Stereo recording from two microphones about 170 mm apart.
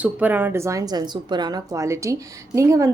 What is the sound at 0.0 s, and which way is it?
Speech, 10° right (ahead or behind).